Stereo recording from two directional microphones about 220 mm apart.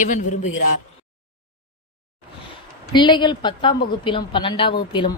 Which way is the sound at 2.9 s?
20° left (ahead or behind).